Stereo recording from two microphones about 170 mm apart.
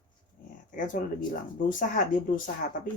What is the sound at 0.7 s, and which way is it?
Speech, 50° left (ahead or behind).